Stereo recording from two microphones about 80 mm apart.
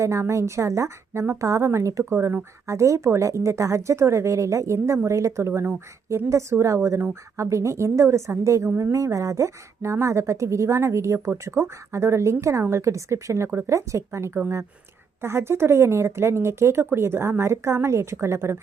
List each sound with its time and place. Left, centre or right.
0.0 s a woman's voice: right
13.5 s speech: right
13.7 s a woman's voice: right